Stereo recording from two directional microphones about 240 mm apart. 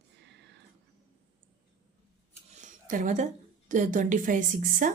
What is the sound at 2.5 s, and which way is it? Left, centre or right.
A woman's voice, right.